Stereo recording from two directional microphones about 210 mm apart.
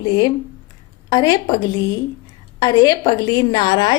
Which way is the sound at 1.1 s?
20° left (ahead or behind).